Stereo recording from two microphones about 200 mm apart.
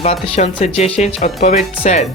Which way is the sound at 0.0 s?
30° left (ahead or behind).